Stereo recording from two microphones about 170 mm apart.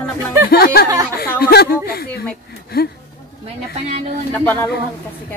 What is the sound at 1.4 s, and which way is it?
Speech, 65° left (ahead or behind).